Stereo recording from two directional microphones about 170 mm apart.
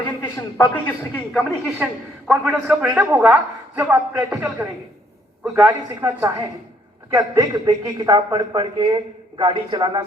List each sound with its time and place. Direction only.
0.2 s a woman's voice: 10° left (ahead or behind); by 10.0 s 25° right (ahead or behind)